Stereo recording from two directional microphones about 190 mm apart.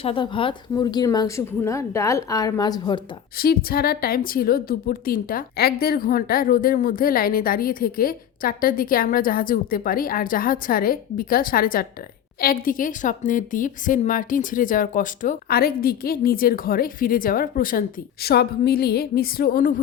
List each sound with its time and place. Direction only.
0.0 s speech: 30° left (ahead or behind)
3.3 s a woman's voice: 55° left (ahead or behind)